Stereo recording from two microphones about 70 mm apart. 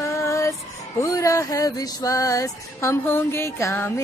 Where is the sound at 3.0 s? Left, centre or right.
Left.